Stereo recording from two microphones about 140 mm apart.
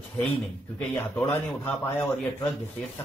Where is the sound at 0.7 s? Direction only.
15° left (ahead or behind).